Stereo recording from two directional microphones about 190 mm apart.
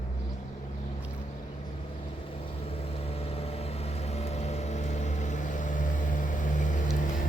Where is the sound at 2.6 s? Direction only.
30° left (ahead or behind).